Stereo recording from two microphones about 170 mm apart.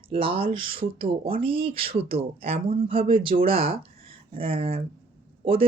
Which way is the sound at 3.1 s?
30° right (ahead or behind).